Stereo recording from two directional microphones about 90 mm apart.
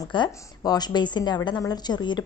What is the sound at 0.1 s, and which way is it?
A woman's voice, 55° left (ahead or behind).